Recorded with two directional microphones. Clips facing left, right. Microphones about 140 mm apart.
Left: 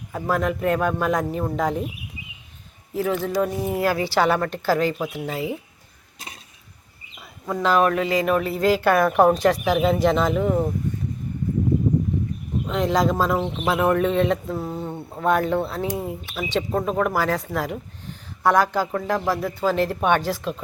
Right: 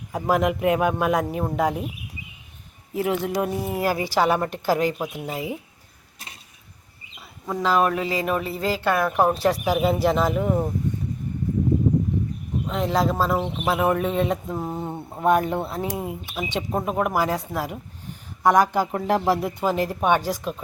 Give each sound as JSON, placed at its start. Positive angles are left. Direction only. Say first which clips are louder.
{"t": 0.1, "sound": "speech", "louder": "right 2 dB", "side_deg": -15}
{"t": 3.0, "sound": "speech", "louder": "left 1 dB", "side_deg": -20}
{"t": 7.2, "sound": "speech", "louder": "left 2 dB", "side_deg": -5}
{"t": 12.6, "sound": "speech", "louder": "left 2 dB", "side_deg": 0}
{"t": 15.8, "sound": "speech", "louder": "left 2 dB", "side_deg": -5}